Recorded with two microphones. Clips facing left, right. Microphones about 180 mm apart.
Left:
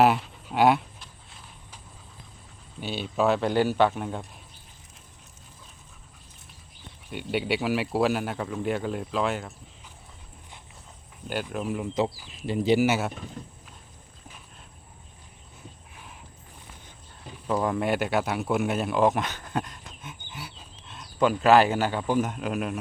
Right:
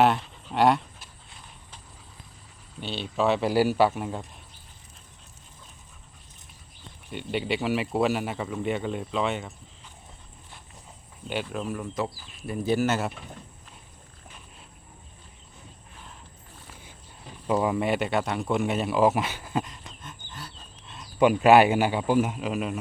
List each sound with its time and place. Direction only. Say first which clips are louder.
0.0 s speech: left 1 dB; 5° left (ahead or behind)
2.8 s speech: left 1 dB; 5° left (ahead or behind)
7.1 s speech: left 1 dB; 5° left (ahead or behind)
11.4 s speech: left 2 dB; 10° left (ahead or behind)
17.4 s speech: right 1 dB; 10° right (ahead or behind); by 20.7 s 10° left (ahead or behind)
20.8 s a sound: even; centre (ahead or behind)
21.2 s a man's voice: right 2 dB; 15° right (ahead or behind)